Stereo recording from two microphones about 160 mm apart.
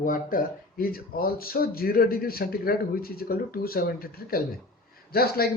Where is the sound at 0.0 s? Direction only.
55° left (ahead or behind).